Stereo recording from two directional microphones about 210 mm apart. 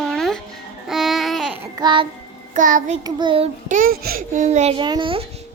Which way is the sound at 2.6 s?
40° right (ahead or behind).